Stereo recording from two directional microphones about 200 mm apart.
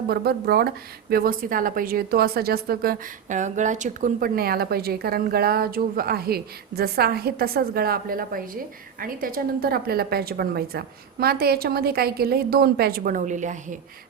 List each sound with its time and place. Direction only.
0.1 s a woman's voice: 50° right (ahead or behind)